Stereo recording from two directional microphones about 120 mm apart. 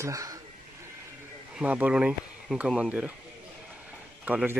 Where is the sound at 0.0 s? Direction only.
25° right (ahead or behind).